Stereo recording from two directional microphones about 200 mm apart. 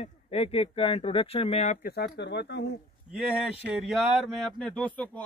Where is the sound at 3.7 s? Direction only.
Centre (ahead or behind).